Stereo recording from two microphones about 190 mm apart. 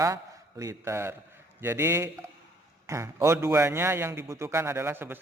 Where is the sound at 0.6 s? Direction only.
15° right (ahead or behind).